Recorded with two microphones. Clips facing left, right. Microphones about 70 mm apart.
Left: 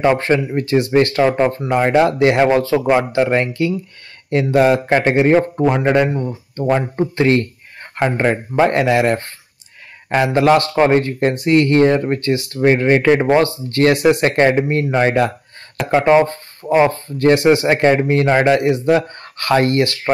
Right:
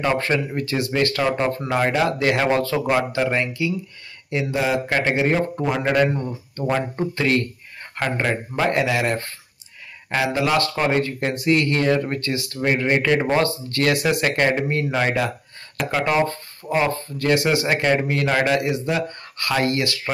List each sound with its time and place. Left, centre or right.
0.0 s a man's voice: left
4.3 s a man's voice: left; by 7.1 s centre
7.2 s speech: left
8.3 s a man's voice: left